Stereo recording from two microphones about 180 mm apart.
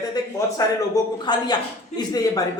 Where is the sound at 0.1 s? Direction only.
20° left (ahead or behind).